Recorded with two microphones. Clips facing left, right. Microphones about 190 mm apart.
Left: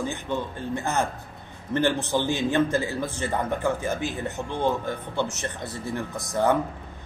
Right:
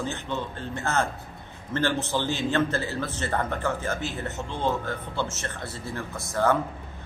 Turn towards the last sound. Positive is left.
turn(degrees=15)  # may be behind; listen again after turning